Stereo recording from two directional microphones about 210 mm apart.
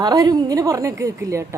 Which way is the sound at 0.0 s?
20° right (ahead or behind).